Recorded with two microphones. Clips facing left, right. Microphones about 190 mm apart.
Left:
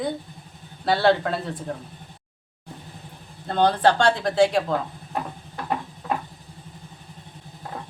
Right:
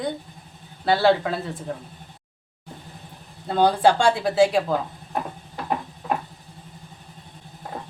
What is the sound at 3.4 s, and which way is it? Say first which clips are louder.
A woman's voice: right 1 dB; 10° right (ahead or behind).